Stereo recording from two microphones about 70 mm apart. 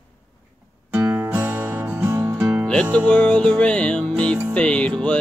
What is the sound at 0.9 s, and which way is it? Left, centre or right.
Music, right.